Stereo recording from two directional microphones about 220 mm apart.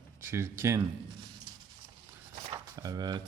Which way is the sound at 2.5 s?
15° right (ahead or behind).